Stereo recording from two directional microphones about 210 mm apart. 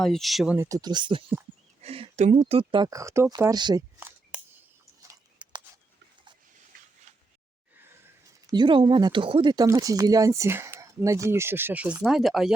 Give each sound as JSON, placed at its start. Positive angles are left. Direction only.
{"t": 0.0, "sound": "speech", "side_deg": 0}
{"t": 5.0, "sound": "a sound", "side_deg": -20}
{"t": 8.4, "sound": "speech", "side_deg": -20}